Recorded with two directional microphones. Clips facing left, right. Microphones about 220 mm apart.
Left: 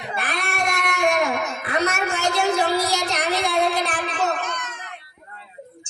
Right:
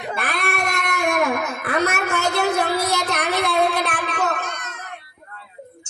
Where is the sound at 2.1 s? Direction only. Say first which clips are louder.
Even; 65° right (ahead or behind).